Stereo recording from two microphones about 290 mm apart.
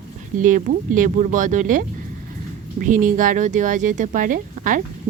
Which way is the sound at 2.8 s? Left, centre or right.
Right.